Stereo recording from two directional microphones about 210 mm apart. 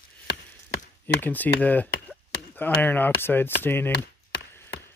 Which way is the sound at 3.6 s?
10° left (ahead or behind).